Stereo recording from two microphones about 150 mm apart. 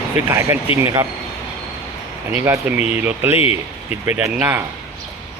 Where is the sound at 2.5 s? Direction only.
10° right (ahead or behind).